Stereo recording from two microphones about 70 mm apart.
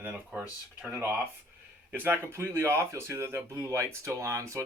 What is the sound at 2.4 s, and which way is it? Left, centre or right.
Speech, right.